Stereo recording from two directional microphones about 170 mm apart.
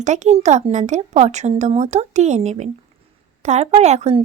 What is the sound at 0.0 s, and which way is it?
A woman's voice, 45° right (ahead or behind).